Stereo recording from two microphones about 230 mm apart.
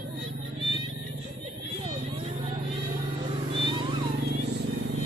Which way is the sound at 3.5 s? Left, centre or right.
Right.